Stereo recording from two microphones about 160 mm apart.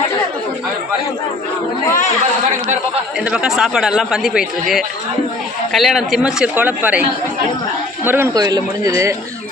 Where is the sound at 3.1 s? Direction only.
5° right (ahead or behind).